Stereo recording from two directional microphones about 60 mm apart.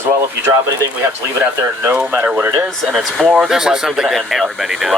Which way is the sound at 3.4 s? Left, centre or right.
Centre.